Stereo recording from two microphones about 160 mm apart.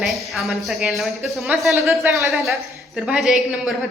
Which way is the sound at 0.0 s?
Centre (ahead or behind).